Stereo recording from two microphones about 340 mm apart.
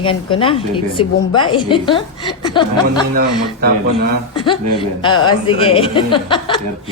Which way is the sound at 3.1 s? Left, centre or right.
Right.